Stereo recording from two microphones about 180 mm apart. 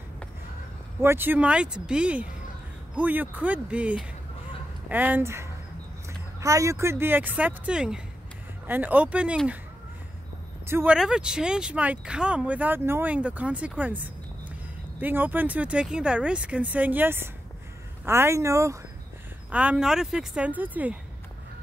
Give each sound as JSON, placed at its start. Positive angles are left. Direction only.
{"t": 1.0, "sound": "speech", "side_deg": -10}
{"t": 10.7, "sound": "speech", "side_deg": -10}